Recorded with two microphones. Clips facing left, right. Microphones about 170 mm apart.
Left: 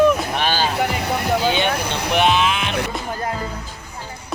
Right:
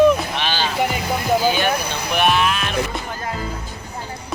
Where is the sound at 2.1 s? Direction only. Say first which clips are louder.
Left 1 dB; 20° left (ahead or behind).